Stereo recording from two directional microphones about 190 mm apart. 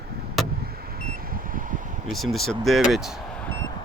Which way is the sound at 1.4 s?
45° right (ahead or behind).